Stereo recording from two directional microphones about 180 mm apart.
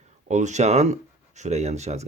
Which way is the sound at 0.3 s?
40° right (ahead or behind).